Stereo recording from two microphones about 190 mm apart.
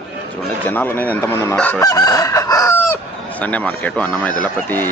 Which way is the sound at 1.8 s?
20° left (ahead or behind).